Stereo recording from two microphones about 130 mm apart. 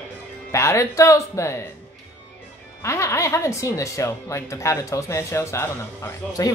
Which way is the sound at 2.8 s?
20° left (ahead or behind).